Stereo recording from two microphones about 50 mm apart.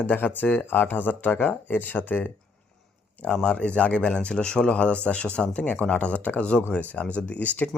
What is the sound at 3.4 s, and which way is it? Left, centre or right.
Speech, left.